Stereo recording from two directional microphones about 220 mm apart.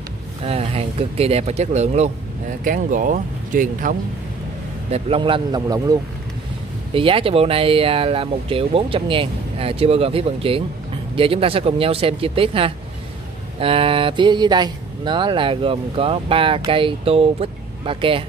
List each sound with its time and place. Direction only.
0.5 s speech: 25° right (ahead or behind)
4.9 s speech: 25° right (ahead or behind)